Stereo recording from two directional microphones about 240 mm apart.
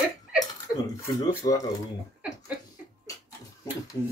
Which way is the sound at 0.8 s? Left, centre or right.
Centre.